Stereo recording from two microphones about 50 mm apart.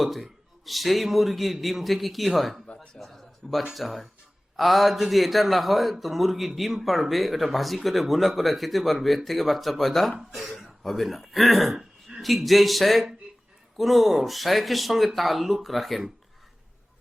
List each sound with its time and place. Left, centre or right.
0.0 s speech: centre